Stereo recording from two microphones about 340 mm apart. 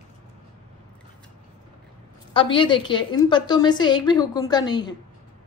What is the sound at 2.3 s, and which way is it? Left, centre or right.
A woman's voice, centre.